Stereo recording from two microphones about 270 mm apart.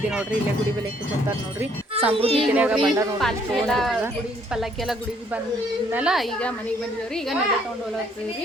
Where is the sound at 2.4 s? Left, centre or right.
Centre.